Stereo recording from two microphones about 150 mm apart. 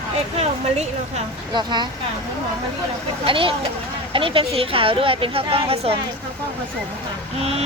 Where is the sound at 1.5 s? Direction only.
30° right (ahead or behind).